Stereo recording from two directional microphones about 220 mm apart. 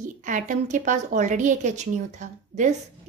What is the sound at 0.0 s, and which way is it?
A woman's voice, 35° right (ahead or behind).